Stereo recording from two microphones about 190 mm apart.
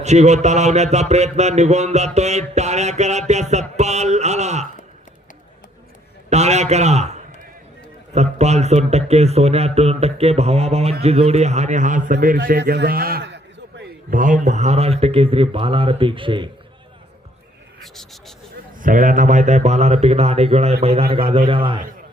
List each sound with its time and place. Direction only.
0.0 s speech: 35° right (ahead or behind)
6.3 s speech: 35° right (ahead or behind)
12.5 s a man's voice: 55° right (ahead or behind)
14.1 s speech: 45° right (ahead or behind); by 16.5 s 25° right (ahead or behind)
17.8 s speech: centre (ahead or behind)
18.8 s a man's voice: 45° right (ahead or behind); by 21.8 s 25° right (ahead or behind)